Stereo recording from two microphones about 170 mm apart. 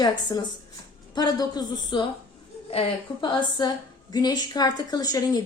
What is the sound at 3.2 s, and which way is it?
A woman's voice, 25° left (ahead or behind).